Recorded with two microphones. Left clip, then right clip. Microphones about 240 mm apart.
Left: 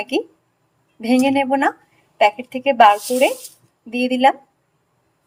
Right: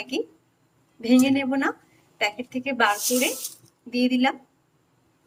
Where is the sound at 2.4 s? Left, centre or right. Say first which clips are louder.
Left 10 dB; centre.